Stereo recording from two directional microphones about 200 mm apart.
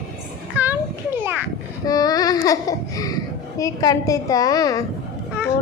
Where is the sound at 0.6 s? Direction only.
10° right (ahead or behind).